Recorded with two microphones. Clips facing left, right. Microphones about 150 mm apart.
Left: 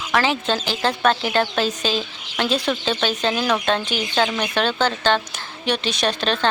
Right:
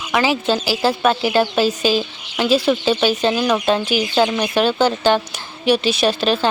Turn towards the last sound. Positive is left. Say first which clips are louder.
# right 5 dB
turn(degrees=-5)  # may be behind; listen again after turning